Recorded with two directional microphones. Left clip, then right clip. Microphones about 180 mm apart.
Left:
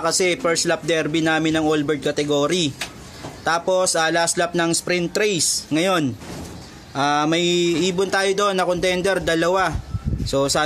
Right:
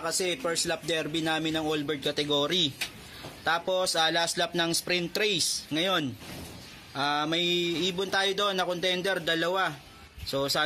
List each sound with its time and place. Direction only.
0.0 s speech: 15° left (ahead or behind)